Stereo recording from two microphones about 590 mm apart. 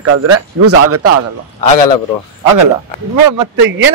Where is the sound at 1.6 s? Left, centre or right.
Left.